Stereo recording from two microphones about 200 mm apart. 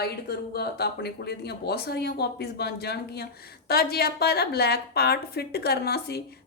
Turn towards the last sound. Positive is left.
turn(degrees=55)  # may be behind; listen again after turning